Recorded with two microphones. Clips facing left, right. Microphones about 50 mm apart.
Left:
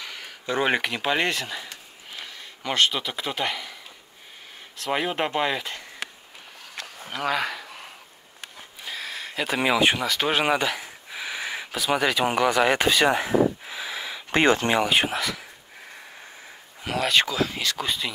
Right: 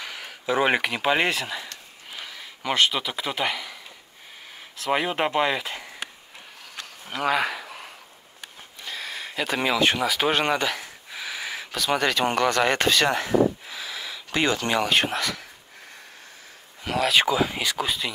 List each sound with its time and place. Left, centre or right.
0.0 s speech: centre
7.1 s a sound: centre
9.9 s speech: centre
10.3 s speech: centre
14.3 s speech: left
14.8 s speech: centre
16.8 s speech: centre
17.2 s speech: centre